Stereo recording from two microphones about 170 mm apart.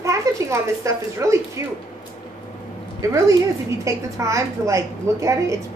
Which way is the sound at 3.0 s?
20° right (ahead or behind).